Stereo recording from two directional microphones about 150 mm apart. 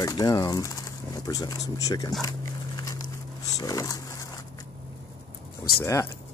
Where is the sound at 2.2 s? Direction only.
25° left (ahead or behind).